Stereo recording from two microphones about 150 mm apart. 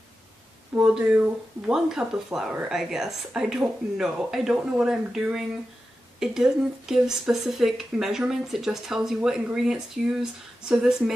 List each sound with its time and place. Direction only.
0.7 s speech: 5° right (ahead or behind)